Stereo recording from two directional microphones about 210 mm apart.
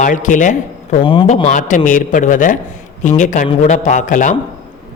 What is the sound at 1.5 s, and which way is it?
A man's voice, 35° left (ahead or behind).